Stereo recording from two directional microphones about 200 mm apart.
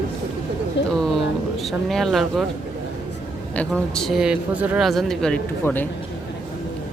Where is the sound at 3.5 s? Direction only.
5° left (ahead or behind).